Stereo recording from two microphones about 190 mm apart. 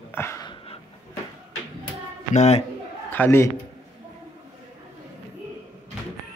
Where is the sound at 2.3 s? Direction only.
35° left (ahead or behind).